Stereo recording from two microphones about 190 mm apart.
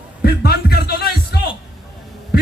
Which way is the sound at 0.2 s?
55° left (ahead or behind).